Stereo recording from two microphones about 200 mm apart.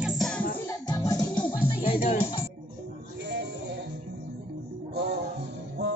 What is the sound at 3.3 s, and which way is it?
Music, 60° right (ahead or behind).